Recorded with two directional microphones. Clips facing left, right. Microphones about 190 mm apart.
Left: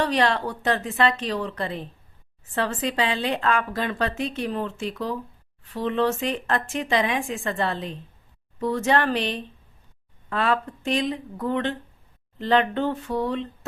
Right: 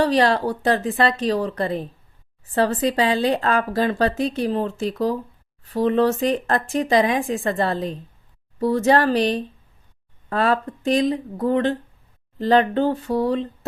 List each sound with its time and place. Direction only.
0.0 s a woman's voice: 35° right (ahead or behind)